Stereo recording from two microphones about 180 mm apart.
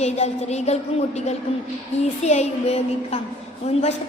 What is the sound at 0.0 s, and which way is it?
Speech, 35° left (ahead or behind).